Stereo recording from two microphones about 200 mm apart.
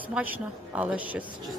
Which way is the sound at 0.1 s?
10° right (ahead or behind).